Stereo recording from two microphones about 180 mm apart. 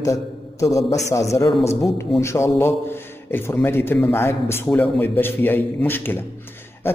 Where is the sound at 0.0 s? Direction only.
15° left (ahead or behind).